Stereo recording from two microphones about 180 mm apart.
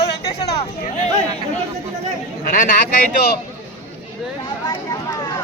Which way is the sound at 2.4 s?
50° left (ahead or behind).